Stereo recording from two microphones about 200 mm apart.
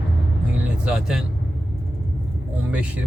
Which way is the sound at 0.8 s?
5° right (ahead or behind).